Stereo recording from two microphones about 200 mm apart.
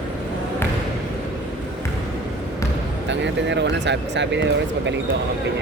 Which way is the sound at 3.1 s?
65° right (ahead or behind).